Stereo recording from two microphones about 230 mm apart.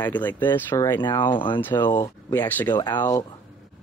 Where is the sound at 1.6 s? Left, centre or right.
Centre.